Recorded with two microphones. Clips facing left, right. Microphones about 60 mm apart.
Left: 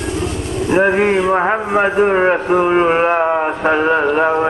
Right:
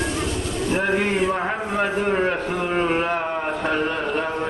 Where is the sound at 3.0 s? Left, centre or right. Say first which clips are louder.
Left 9 dB; left.